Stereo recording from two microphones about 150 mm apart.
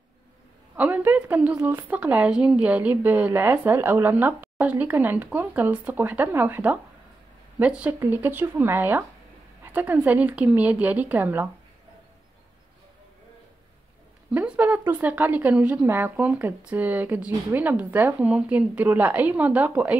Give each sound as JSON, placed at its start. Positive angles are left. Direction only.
{"t": 0.7, "sound": "a woman's voice", "side_deg": -10}
{"t": 9.7, "sound": "a sound", "side_deg": -10}
{"t": 10.0, "sound": "a woman's voice", "side_deg": -10}
{"t": 14.3, "sound": "a woman's voice", "side_deg": -10}